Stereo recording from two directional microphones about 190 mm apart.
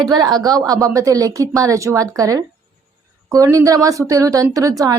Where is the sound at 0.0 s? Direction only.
20° right (ahead or behind).